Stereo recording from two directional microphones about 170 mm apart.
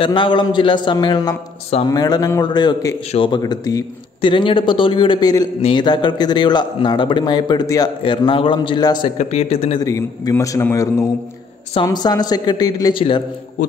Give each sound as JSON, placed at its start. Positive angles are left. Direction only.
{"t": 0.0, "sound": "speech", "side_deg": 30}
{"t": 1.9, "sound": "speech", "side_deg": 20}
{"t": 9.2, "sound": "a man's voice", "side_deg": 40}
{"t": 9.8, "sound": "speech", "side_deg": 20}